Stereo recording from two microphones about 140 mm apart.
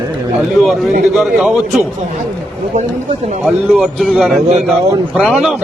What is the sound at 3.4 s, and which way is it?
Speech, centre (ahead or behind).